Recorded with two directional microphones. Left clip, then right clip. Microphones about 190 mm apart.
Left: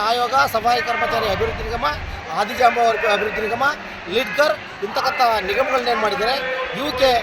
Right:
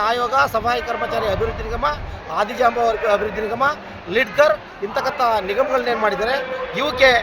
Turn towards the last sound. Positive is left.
turn(degrees=0)  # may be behind; listen again after turning